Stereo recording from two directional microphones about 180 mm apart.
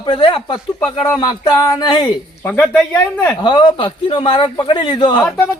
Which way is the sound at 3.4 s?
25° left (ahead or behind).